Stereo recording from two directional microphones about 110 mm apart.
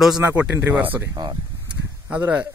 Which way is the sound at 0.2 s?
20° right (ahead or behind).